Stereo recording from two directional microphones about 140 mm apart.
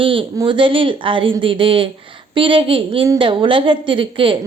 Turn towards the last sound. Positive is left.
turn(degrees=-40)  # may be behind; listen again after turning